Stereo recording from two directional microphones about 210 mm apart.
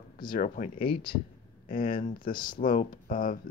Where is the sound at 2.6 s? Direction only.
40° left (ahead or behind).